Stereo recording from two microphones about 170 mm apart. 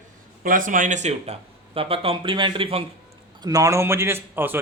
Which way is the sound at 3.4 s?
20° right (ahead or behind).